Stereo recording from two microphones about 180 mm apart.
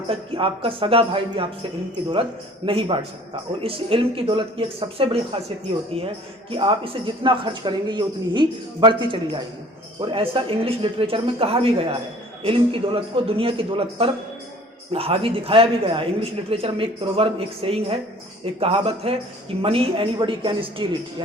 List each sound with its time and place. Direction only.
0.1 s speech: 30° right (ahead or behind)
2.6 s a man's voice: 30° right (ahead or behind)